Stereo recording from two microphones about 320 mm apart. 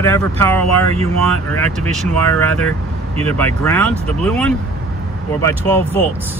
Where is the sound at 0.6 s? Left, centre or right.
Centre.